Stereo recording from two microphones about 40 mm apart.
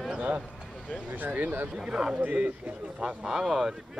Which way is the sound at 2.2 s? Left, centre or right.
Right.